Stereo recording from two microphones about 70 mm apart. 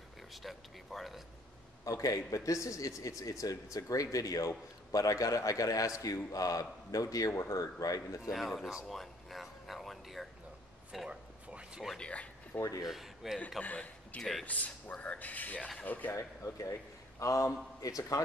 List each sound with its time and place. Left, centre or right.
0.3 s speech: centre
1.9 s a man's voice: left
8.2 s speech: centre
8.8 s a sound: centre
11.1 s a sound: centre
12.0 s a sound: centre
12.5 s a man's voice: left
12.8 s speech: centre
13.6 s a man's voice: left
16.2 s a man's voice: left